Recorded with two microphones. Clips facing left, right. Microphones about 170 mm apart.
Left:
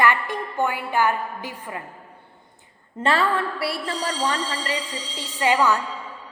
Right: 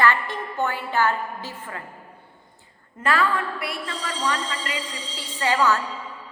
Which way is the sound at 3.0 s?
30° left (ahead or behind).